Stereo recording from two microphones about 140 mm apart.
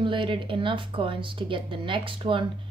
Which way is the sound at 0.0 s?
35° right (ahead or behind).